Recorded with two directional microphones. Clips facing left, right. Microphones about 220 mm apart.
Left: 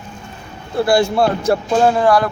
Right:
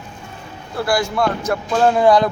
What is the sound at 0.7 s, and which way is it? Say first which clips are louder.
Speech: left 5 dB; 25° left (ahead or behind).